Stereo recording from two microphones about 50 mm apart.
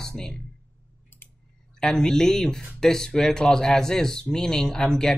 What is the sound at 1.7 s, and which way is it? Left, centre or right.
Speech, centre.